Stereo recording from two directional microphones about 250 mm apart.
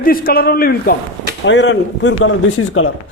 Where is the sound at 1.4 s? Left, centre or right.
Left.